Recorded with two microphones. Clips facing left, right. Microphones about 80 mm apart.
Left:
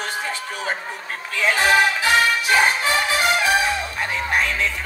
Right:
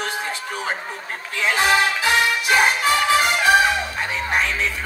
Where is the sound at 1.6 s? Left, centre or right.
Left.